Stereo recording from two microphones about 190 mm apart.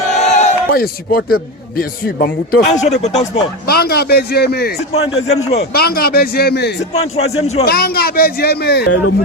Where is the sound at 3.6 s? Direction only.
55° left (ahead or behind).